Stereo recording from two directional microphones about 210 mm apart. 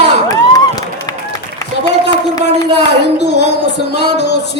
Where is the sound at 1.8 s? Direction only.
55° left (ahead or behind).